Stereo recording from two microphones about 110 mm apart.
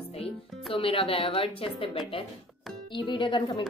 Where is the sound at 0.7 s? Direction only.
55° left (ahead or behind).